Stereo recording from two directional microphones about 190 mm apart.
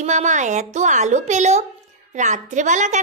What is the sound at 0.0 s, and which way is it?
A woman's voice, 40° right (ahead or behind).